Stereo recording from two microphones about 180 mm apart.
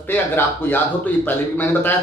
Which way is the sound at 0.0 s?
10° left (ahead or behind).